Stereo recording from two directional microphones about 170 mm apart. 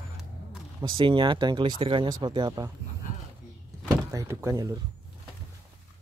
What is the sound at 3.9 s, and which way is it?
Door, 20° right (ahead or behind).